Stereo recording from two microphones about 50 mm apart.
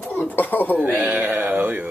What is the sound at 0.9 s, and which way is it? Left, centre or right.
Mantra, right.